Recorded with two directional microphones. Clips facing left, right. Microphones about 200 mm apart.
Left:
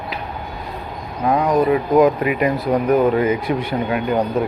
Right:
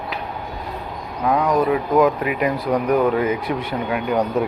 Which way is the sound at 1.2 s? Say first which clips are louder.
Left 2 dB; 10° left (ahead or behind).